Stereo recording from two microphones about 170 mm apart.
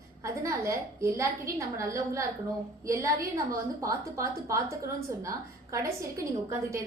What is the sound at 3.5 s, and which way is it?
A woman's voice, 20° right (ahead or behind).